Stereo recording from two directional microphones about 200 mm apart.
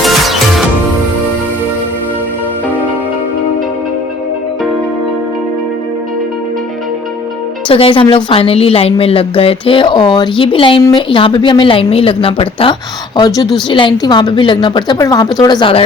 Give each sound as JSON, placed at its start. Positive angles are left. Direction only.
{"t": 0.0, "sound": "music", "side_deg": 0}
{"t": 7.7, "sound": "a woman's voice", "side_deg": 25}